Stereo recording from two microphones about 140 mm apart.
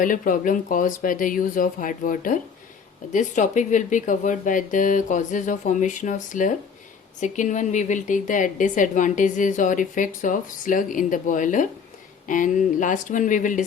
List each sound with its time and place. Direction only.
0.0 s a woman's voice: 70° left (ahead or behind)
3.1 s a woman's voice: 60° left (ahead or behind)